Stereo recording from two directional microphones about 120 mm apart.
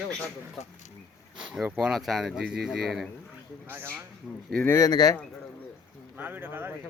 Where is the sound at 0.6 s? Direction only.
70° left (ahead or behind).